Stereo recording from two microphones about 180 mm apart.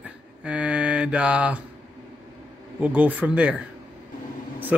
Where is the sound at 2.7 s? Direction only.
10° right (ahead or behind).